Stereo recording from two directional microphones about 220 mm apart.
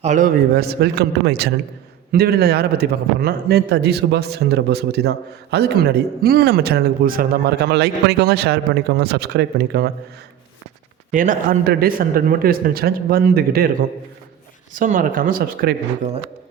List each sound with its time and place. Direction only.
0.0 s a man's voice: 35° right (ahead or behind)
11.1 s a man's voice: 35° right (ahead or behind)
14.7 s a man's voice: 35° right (ahead or behind)